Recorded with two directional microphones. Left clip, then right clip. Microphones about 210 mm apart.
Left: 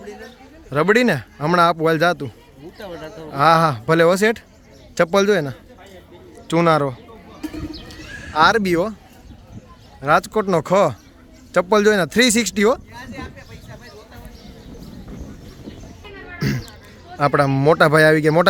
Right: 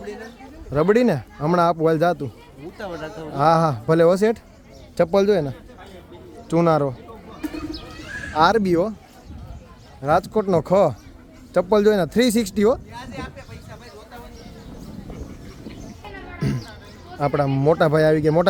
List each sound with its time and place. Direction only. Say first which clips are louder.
0.7 s a man's voice: left 2 dB; centre (ahead or behind)
8.3 s a man's voice: left 2 dB; 5° right (ahead or behind)
10.0 s a man's voice: left 2 dB; centre (ahead or behind)
16.4 s a sound: left 3 dB; 10° left (ahead or behind)
17.2 s speech: left 4 dB; 10° left (ahead or behind)